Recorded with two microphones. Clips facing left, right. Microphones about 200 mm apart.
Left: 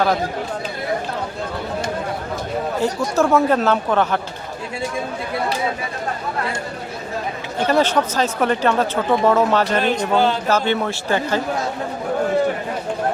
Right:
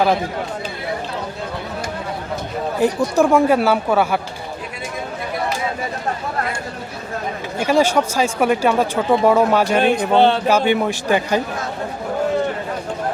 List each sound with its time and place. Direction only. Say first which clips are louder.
2.8 s speech: right 4 dB; 15° right (ahead or behind)
7.6 s speech: right 1 dB; 10° right (ahead or behind)
10.1 s speech: right 4 dB; 25° right (ahead or behind)
10.4 s speech: right 3 dB; 15° right (ahead or behind)